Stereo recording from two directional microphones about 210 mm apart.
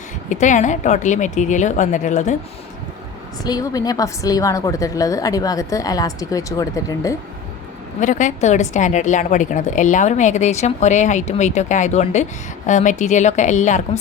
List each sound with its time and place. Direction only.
0.3 s a woman's voice: 35° left (ahead or behind)
3.4 s a woman's voice: 15° left (ahead or behind)
8.0 s a woman's voice: 35° left (ahead or behind)